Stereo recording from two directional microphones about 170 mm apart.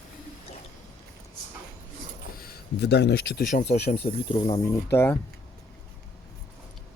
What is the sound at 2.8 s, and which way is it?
Speech, 85° left.